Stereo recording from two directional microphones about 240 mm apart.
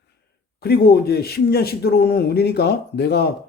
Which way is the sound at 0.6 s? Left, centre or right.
Left.